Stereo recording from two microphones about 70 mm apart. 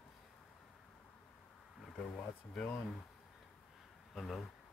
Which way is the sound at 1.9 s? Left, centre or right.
Centre.